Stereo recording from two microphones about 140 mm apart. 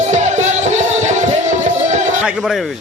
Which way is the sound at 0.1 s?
55° right (ahead or behind).